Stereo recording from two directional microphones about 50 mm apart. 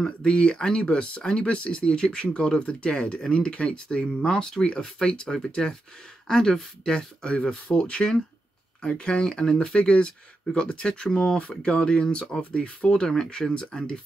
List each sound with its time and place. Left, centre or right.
0.0 s speech: centre
11.3 s speech: centre